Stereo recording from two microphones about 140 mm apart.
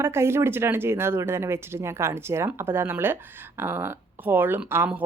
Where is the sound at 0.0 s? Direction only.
20° right (ahead or behind).